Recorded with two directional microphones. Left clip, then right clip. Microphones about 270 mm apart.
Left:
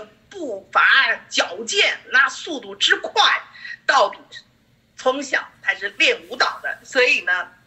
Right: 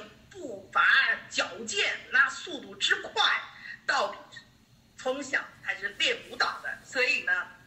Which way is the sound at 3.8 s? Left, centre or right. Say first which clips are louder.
Left 12 dB; left.